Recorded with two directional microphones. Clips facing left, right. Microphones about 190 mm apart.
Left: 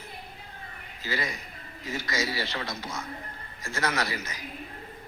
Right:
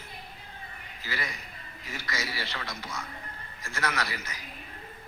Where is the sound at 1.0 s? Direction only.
20° left (ahead or behind).